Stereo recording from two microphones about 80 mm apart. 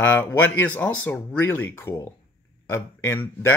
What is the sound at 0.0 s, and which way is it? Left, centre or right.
Speech, left.